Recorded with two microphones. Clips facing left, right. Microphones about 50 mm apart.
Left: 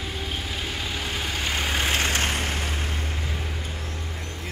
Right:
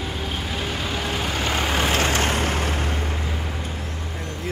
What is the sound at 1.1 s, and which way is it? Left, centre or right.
Vehicle, right.